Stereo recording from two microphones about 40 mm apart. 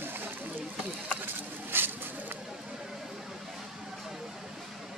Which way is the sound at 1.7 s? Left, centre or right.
Right.